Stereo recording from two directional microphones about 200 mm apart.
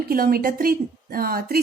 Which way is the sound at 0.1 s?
45° right (ahead or behind).